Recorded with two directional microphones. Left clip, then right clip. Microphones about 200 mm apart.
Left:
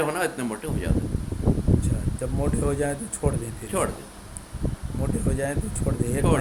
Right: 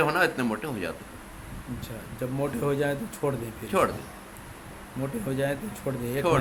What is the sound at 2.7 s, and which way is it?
Speech, 10° left (ahead or behind).